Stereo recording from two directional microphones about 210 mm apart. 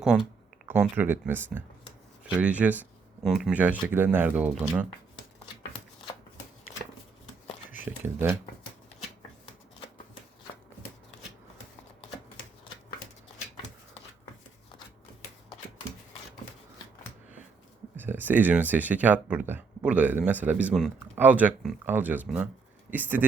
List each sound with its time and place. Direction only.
0.0 s speech: 5° right (ahead or behind)
8.0 s speech: 10° right (ahead or behind)
17.9 s speech: 10° right (ahead or behind)